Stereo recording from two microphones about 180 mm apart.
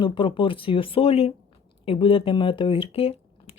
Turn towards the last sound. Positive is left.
turn(degrees=30)  # may be behind; listen again after turning